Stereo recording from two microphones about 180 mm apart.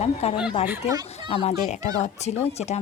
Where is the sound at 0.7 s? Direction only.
20° right (ahead or behind).